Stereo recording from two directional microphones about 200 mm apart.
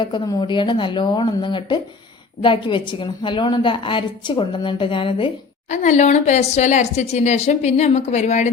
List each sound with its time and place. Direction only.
0.0 s a woman's voice: 20° left (ahead or behind)
5.7 s speech: 35° left (ahead or behind)